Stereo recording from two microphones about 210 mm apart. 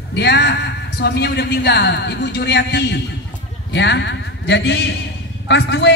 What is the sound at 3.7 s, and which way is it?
A man's voice, 55° left (ahead or behind).